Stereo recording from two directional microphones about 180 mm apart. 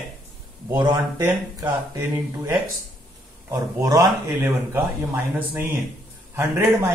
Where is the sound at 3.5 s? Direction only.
20° right (ahead or behind).